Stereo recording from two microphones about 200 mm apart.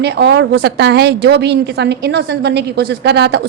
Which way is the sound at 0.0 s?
55° right (ahead or behind).